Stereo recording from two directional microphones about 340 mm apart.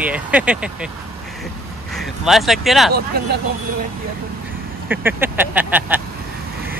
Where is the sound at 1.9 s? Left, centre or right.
Centre.